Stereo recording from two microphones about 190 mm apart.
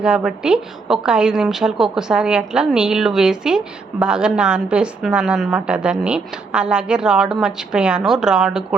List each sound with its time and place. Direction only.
0.0 s a woman's voice: 5° right (ahead or behind)